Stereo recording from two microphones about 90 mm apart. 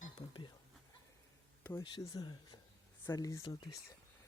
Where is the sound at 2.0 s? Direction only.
45° left (ahead or behind).